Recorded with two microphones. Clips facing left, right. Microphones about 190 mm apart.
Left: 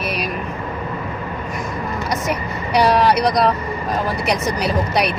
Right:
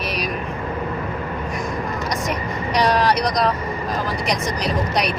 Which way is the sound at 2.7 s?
5° left (ahead or behind).